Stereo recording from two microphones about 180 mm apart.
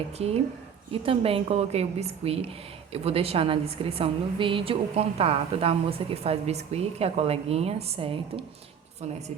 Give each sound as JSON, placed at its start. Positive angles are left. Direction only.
{"t": 0.2, "sound": "a woman's voice", "side_deg": -35}